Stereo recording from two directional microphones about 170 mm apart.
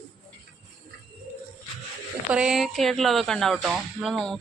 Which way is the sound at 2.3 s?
5° right (ahead or behind).